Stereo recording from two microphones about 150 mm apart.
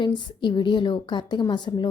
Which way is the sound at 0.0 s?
30° left (ahead or behind).